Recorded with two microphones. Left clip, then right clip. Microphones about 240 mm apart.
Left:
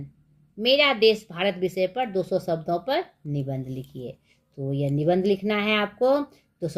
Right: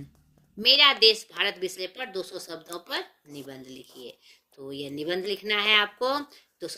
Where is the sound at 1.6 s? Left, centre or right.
Centre.